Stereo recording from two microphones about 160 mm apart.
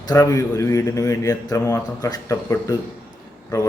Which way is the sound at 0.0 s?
20° left (ahead or behind).